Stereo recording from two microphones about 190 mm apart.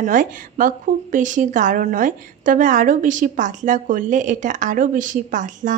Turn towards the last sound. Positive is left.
turn(degrees=-40)  # may be behind; listen again after turning